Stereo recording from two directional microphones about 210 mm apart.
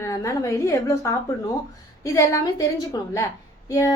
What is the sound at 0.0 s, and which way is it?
A woman's voice, 15° left (ahead or behind).